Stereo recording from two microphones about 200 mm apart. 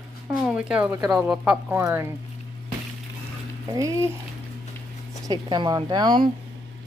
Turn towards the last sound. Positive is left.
turn(degrees=-20)  # may be behind; listen again after turning